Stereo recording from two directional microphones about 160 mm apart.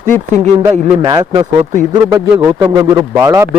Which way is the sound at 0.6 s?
20° right (ahead or behind).